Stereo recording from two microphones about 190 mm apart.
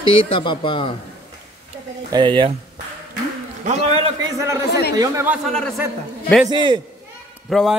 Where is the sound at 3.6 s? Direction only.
35° right (ahead or behind).